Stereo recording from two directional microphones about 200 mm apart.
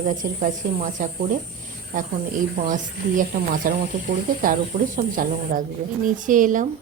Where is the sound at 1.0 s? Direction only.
40° right (ahead or behind).